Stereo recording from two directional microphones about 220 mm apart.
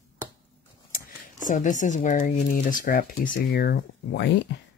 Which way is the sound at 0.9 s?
40° left (ahead or behind).